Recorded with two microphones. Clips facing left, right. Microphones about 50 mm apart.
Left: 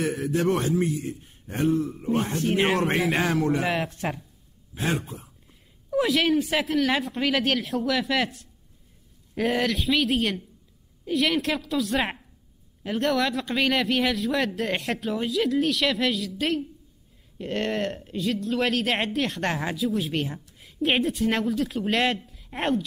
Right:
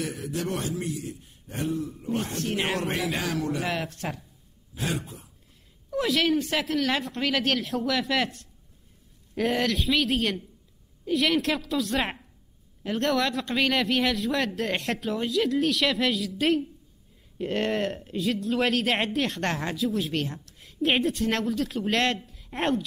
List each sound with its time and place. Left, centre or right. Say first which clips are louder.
0.0 s a man's voice: left 7 dB; left
3.7 s speech: left 3 dB; left
4.7 s a man's voice: left 3 dB; left
5.9 s speech: left 2 dB; centre